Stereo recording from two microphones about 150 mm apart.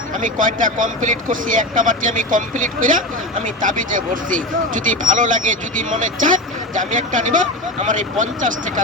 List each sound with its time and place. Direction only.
0.1 s speech: 60° right (ahead or behind)